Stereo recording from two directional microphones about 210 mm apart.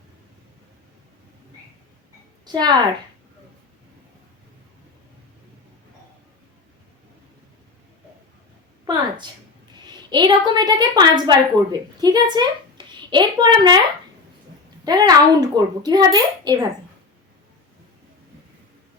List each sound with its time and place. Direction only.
2.5 s a child's voice: 20° right (ahead or behind)
8.8 s a sound: 20° right (ahead or behind)
9.8 s a woman's voice: 20° right (ahead or behind)
14.8 s a child's voice: 20° right (ahead or behind)